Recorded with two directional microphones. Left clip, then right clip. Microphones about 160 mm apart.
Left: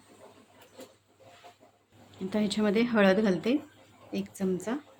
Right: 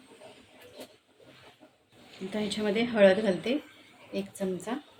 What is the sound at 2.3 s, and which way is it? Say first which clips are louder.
A woman's voice: left 2 dB; 90° left.